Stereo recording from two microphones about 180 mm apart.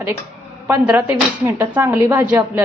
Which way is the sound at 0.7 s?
10° right (ahead or behind).